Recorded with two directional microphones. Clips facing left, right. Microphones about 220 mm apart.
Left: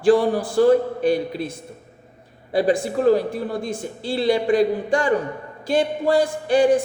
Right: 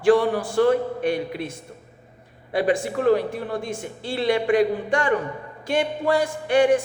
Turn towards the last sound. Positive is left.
turn(degrees=35)  # may be behind; listen again after turning